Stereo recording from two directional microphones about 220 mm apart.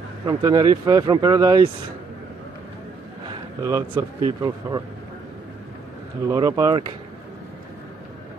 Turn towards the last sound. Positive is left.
turn(degrees=-15)  # may be behind; listen again after turning